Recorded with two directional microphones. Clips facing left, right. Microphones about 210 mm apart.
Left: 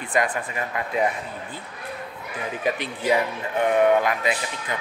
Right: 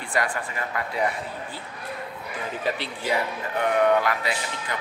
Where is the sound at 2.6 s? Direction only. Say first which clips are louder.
Left 5 dB; 15° left (ahead or behind).